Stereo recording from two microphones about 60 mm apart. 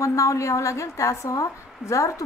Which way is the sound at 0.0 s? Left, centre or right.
Left.